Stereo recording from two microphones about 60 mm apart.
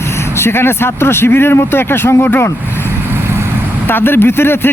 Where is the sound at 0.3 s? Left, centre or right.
Left.